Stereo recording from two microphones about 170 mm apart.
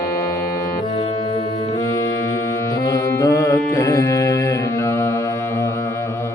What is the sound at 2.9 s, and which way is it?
Music, 20° left (ahead or behind).